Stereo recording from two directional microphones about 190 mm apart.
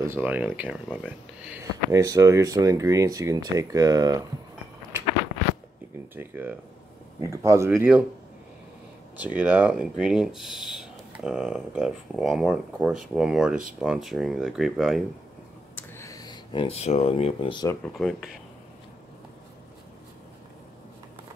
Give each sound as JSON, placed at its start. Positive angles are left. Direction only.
{"t": 0.0, "sound": "speech", "side_deg": -10}
{"t": 6.1, "sound": "speech", "side_deg": -10}
{"t": 9.1, "sound": "speech", "side_deg": -10}
{"t": 15.7, "sound": "a sound", "side_deg": 15}
{"t": 17.8, "sound": "speech", "side_deg": 0}